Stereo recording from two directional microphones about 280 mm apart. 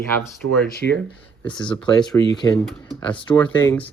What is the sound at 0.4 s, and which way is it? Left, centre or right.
Speech, right.